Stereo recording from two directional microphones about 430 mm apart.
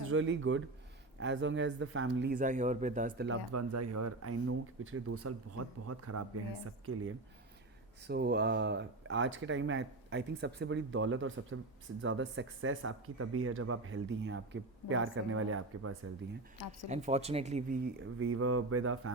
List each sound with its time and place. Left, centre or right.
0.0 s speech: right
3.5 s speech: right
16.9 s speech: centre; by 19.1 s right